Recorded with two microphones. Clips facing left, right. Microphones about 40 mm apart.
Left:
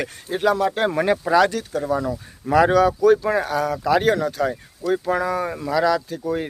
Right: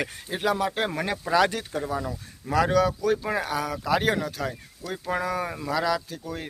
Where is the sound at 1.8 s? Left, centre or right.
Centre.